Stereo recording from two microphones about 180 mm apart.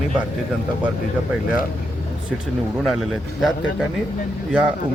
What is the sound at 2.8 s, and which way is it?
A man's voice, centre (ahead or behind).